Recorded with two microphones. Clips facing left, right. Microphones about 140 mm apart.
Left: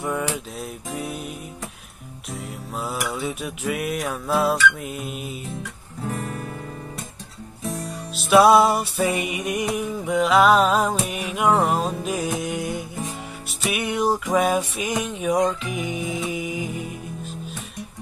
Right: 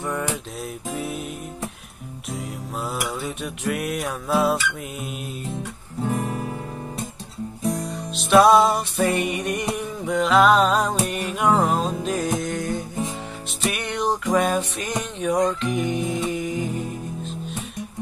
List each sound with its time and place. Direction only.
0.0 s music: 10° left (ahead or behind)
0.6 s music: centre (ahead or behind)
2.3 s music: centre (ahead or behind)
6.0 s guitar: 15° right (ahead or behind)
7.8 s music: centre (ahead or behind)